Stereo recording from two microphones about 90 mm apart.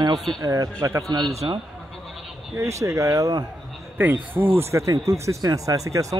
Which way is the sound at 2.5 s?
35° right (ahead or behind).